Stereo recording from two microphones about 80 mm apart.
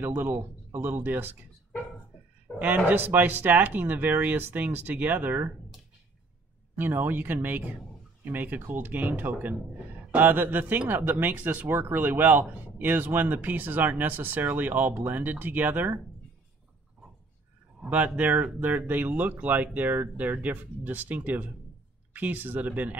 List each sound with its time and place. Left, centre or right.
0.0 s speech: right
2.6 s speech: right
6.8 s speech: right
17.8 s speech: centre